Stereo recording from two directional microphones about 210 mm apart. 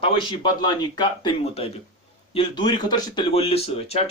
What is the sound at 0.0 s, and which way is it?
Speech, 25° left (ahead or behind).